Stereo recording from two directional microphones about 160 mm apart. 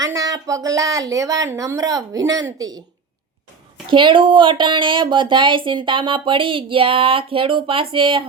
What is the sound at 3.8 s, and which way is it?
Speech, 30° right (ahead or behind).